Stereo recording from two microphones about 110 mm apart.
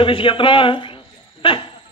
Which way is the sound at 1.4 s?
45° left (ahead or behind).